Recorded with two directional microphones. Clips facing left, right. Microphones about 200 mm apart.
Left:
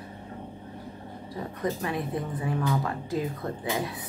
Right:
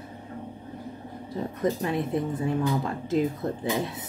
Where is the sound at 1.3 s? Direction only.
25° right (ahead or behind).